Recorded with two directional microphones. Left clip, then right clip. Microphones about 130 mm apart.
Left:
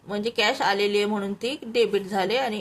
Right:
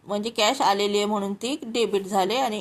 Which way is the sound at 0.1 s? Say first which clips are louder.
Right 1 dB; 25° right (ahead or behind).